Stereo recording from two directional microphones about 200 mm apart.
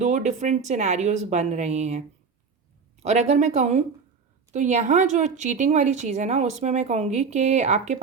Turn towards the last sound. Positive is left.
turn(degrees=-35)  # may be behind; listen again after turning